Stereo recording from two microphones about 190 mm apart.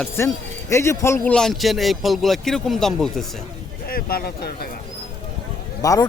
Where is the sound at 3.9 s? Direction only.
50° left (ahead or behind).